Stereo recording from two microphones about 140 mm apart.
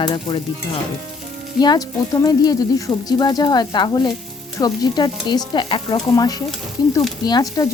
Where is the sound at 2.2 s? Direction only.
25° left (ahead or behind).